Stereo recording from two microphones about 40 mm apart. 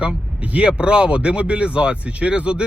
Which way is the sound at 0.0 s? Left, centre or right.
Right.